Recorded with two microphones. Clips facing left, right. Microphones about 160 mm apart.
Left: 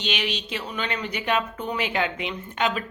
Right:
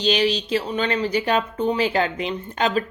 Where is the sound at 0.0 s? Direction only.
35° right (ahead or behind).